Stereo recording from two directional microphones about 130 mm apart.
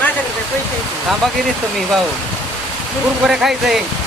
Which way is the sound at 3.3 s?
5° right (ahead or behind).